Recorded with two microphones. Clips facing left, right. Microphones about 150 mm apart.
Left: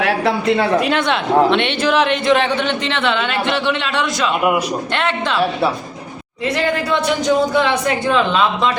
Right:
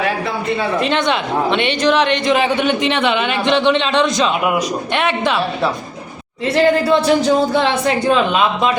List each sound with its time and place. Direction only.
0.0 s speech: 80° left
0.8 s speech: 5° left (ahead or behind); by 5.4 s 15° right (ahead or behind)
6.8 s a sound: 35° right (ahead or behind)
8.0 s speech: 15° right (ahead or behind)